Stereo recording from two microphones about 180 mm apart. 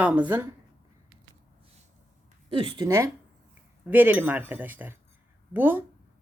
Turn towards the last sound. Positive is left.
turn(degrees=-10)  # may be behind; listen again after turning